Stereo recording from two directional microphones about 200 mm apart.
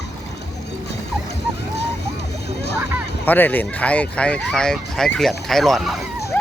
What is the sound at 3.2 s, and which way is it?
Speech, 10° left (ahead or behind).